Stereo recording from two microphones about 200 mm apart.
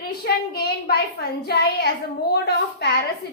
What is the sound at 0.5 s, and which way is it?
A child's voice, 50° left (ahead or behind).